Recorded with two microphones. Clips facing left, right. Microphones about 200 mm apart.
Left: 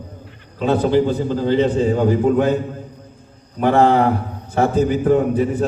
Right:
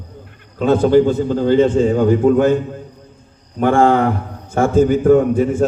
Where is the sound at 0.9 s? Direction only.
45° right (ahead or behind).